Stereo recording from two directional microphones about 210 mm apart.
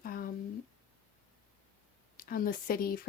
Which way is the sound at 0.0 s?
45° left (ahead or behind).